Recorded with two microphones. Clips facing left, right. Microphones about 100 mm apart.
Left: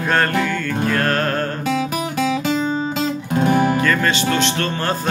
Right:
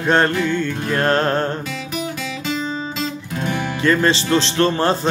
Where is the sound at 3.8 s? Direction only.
25° right (ahead or behind).